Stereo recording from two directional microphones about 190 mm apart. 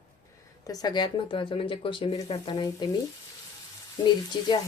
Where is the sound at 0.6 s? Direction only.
20° left (ahead or behind).